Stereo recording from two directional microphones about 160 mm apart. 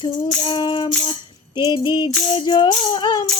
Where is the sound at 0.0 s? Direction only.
30° left (ahead or behind).